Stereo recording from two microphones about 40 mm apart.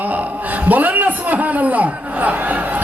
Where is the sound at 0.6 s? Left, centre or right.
Right.